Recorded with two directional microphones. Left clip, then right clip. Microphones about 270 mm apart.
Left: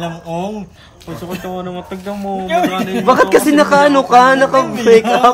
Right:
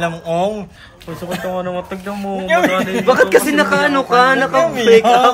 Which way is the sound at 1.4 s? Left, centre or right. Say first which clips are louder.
Right 4 dB; centre.